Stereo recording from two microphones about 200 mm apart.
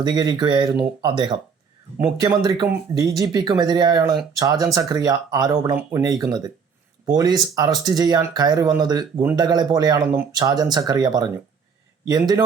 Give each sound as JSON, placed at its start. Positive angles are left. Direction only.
{"t": 0.0, "sound": "speech", "side_deg": -20}